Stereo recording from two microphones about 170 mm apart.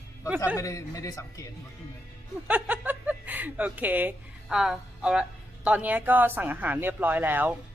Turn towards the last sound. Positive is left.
turn(degrees=-10)  # may be behind; listen again after turning